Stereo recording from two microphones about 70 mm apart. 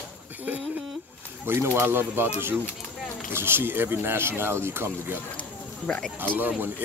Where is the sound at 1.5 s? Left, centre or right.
Right.